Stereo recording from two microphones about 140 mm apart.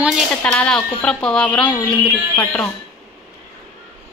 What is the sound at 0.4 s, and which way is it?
Speech, 10° left (ahead or behind).